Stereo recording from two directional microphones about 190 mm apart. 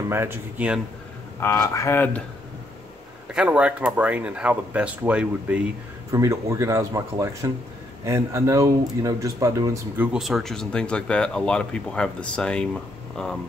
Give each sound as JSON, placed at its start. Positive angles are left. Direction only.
{"t": 0.1, "sound": "speech", "side_deg": -10}
{"t": 1.4, "sound": "speech", "side_deg": 15}
{"t": 3.3, "sound": "speech", "side_deg": -5}
{"t": 10.1, "sound": "speech", "side_deg": 0}